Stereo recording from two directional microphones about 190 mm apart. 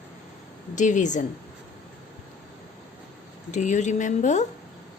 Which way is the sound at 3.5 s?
40° left (ahead or behind).